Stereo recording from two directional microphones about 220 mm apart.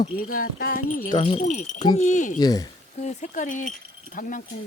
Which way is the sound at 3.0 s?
35° left (ahead or behind).